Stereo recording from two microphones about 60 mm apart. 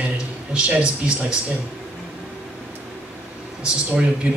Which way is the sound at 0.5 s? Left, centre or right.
Centre.